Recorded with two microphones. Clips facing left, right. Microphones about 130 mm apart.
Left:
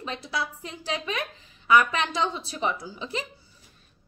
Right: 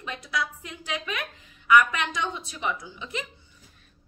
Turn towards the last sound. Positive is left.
turn(degrees=35)  # may be behind; listen again after turning